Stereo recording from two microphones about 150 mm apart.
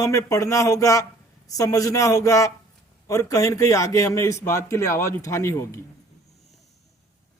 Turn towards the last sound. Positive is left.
turn(degrees=20)  # may be behind; listen again after turning